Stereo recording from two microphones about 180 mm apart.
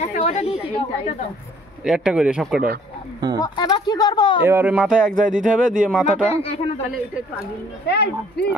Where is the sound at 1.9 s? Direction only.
5° right (ahead or behind).